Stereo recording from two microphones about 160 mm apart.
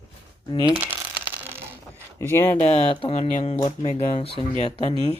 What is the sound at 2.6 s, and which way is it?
Speech, 40° left (ahead or behind).